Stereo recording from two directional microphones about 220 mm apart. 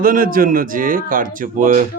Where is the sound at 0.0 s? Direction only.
40° right (ahead or behind).